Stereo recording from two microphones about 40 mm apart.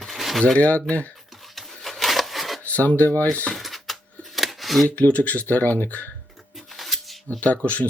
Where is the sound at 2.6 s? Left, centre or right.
Left.